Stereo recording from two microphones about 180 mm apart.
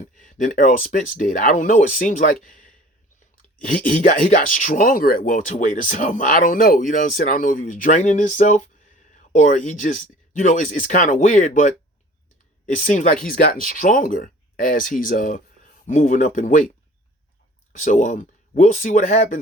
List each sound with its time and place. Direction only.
0.2 s speech: 45° left (ahead or behind)
4.0 s speech: 45° left (ahead or behind)
12.7 s speech: 45° left (ahead or behind)